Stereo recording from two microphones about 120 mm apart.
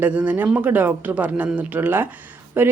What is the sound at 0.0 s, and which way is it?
A woman's voice, 10° right (ahead or behind).